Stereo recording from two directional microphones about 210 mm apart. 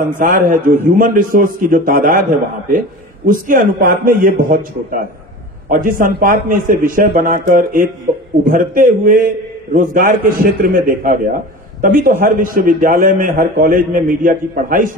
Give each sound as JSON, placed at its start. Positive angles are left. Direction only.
{"t": 0.2, "sound": "a man's voice", "side_deg": -40}
{"t": 3.3, "sound": "a man's voice", "side_deg": -40}